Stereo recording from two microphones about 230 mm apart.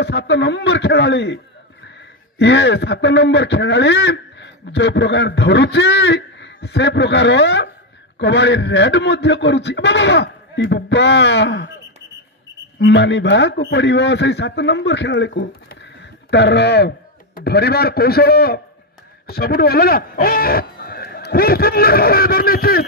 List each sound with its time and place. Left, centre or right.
0.0 s a man's voice: left
12.7 s a man's voice: left